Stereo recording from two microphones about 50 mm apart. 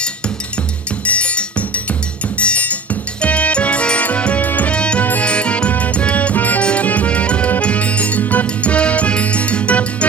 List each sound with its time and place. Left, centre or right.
1.0 s music: left
4.7 s music: left